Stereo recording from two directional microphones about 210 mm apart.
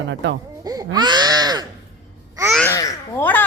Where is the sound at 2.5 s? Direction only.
10° left (ahead or behind).